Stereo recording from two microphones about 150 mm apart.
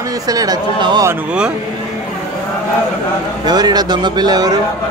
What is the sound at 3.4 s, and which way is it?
A man's voice, 25° right (ahead or behind).